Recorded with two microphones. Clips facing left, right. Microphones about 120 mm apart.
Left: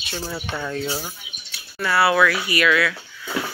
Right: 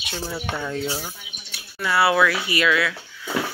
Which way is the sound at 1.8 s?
20° right (ahead or behind).